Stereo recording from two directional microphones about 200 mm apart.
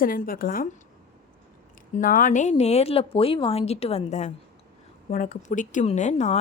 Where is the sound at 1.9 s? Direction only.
45° left (ahead or behind).